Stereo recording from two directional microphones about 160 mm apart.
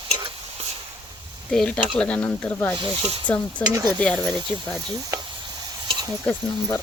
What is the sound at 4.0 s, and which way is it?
Speech, 5° left (ahead or behind).